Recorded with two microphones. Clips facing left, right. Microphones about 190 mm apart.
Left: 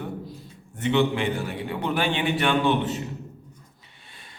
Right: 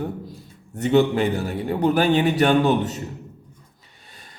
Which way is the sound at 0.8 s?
40° right (ahead or behind).